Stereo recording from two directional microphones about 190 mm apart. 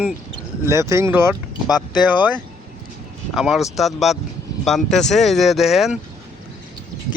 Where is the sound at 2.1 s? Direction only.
10° right (ahead or behind).